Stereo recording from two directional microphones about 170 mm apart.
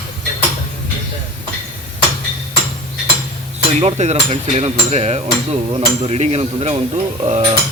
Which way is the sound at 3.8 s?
40° right (ahead or behind).